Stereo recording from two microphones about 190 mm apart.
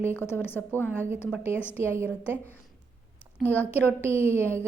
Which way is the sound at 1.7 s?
15° right (ahead or behind).